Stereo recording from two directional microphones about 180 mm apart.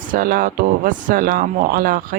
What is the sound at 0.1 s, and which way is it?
Speech, 50° right (ahead or behind).